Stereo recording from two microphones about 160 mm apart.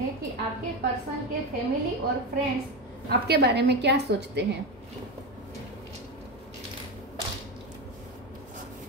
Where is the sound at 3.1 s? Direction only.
90° right.